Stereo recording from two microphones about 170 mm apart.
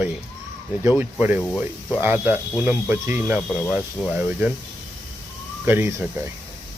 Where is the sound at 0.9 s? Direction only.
10° right (ahead or behind).